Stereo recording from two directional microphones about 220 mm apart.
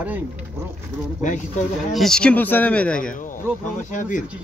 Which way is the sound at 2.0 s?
5° left (ahead or behind).